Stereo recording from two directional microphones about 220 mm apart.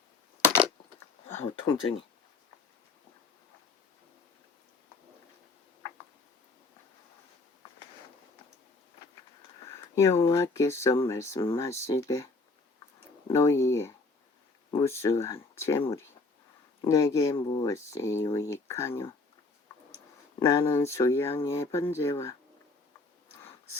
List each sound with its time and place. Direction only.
1.6 s speech: 20° left (ahead or behind)
9.6 s speech: 10° left (ahead or behind)
20.4 s speech: 15° left (ahead or behind)